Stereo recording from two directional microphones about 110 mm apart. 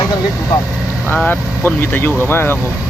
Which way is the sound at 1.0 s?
15° left (ahead or behind).